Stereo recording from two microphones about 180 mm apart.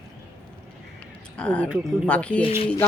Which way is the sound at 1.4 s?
5° left (ahead or behind).